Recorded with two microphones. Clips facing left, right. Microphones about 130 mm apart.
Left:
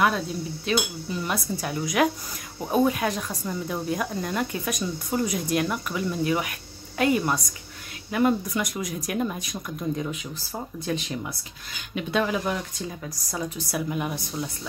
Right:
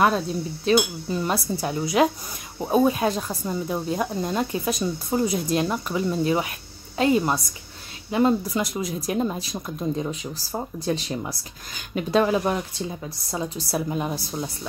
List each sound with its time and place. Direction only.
0.7 s speech: 35° right (ahead or behind)